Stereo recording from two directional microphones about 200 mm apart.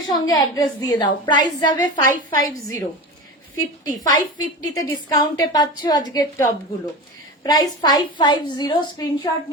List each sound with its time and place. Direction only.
0.1 s a woman's voice: 20° left (ahead or behind)